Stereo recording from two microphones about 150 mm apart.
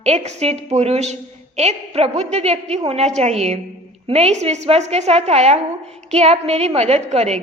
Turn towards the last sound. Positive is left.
turn(degrees=-45)  # may be behind; listen again after turning